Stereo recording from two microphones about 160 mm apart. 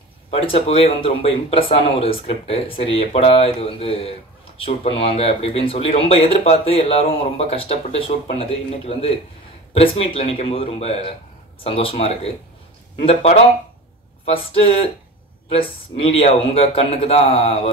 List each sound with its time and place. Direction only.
0.3 s speech: 35° left (ahead or behind)